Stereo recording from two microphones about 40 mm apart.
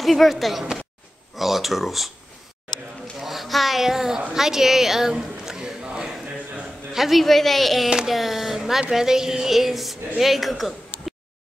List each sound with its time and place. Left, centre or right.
0.0 s a woman's voice: centre
3.2 s a sound: centre
6.9 s a woman's voice: centre